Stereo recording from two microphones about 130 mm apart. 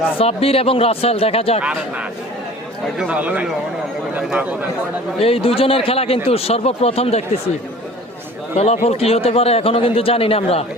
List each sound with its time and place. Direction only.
0.2 s a man's voice: 50° left (ahead or behind)
3.0 s a man's voice: 10° right (ahead or behind)
5.2 s a man's voice: 45° left (ahead or behind)
8.5 s a man's voice: 55° left (ahead or behind)